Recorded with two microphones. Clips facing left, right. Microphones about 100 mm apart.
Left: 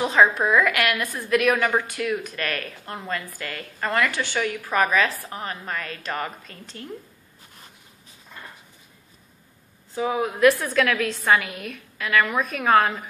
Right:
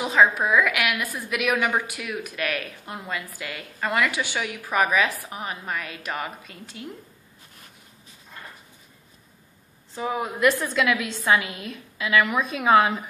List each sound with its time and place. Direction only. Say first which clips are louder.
0.0 s a woman's voice: left 1 dB; 5° right (ahead or behind)
9.9 s a woman's voice: left 3 dB; centre (ahead or behind)
11.4 s a woman's voice: left 1 dB; 75° left (ahead or behind)
12.1 s a woman's voice: even; 10° right (ahead or behind)